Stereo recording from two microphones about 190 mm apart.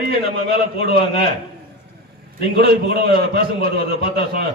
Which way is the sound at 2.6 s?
55° right (ahead or behind).